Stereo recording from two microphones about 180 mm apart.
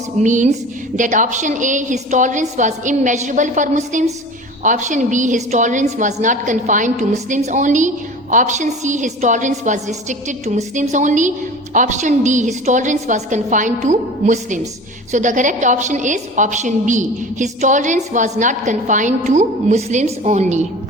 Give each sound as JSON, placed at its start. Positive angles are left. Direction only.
{"t": 0.2, "sound": "a woman's voice", "side_deg": -45}